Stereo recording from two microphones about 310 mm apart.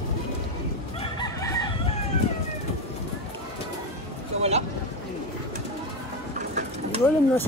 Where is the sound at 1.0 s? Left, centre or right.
Centre.